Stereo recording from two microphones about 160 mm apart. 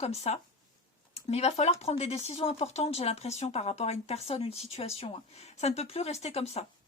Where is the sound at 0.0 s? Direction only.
40° left (ahead or behind).